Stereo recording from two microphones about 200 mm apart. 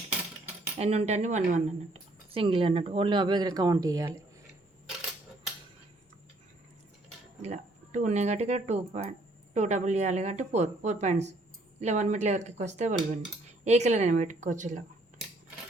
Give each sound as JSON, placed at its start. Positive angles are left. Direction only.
{"t": 0.8, "sound": "speech", "side_deg": -30}
{"t": 7.4, "sound": "speech", "side_deg": -35}